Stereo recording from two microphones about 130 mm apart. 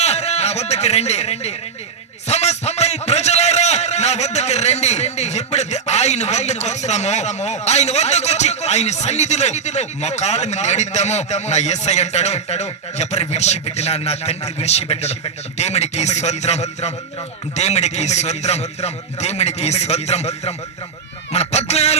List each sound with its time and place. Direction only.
0.0 s a man's voice: 55° left (ahead or behind)